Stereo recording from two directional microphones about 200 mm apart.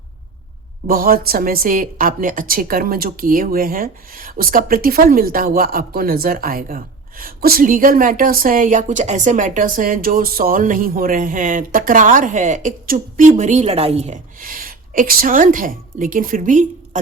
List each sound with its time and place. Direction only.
0.9 s a woman's voice: 45° right (ahead or behind)